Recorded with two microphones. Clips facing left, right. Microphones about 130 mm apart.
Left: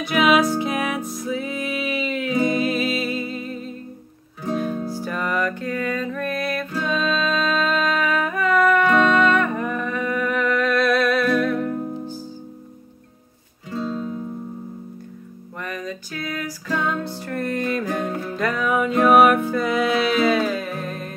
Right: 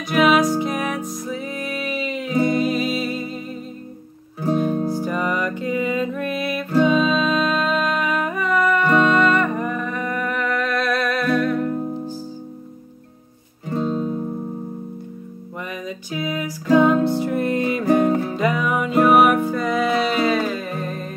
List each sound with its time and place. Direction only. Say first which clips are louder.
0.1 s music: right 1 dB; 5° left (ahead or behind)
4.7 s music: right 5 dB; 50° right (ahead or behind)
5.0 s music: right 1 dB; 10° right (ahead or behind)
13.7 s music: right 4 dB; 30° right (ahead or behind)
15.6 s music: left 1 dB; 10° right (ahead or behind)
17.7 s music: right 8 dB; 10° right (ahead or behind)